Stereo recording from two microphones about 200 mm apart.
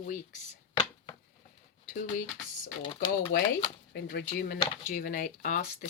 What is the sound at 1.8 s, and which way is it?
Speech, 40° left (ahead or behind).